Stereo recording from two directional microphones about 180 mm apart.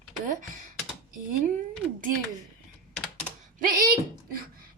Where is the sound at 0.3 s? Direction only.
45° right (ahead or behind).